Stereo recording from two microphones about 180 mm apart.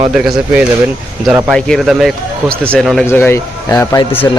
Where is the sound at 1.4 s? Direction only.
Centre (ahead or behind).